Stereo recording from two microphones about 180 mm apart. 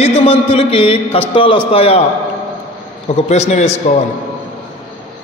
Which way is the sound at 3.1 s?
35° left (ahead or behind).